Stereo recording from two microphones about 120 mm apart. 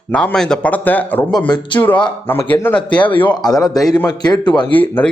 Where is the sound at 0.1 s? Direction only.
10° left (ahead or behind).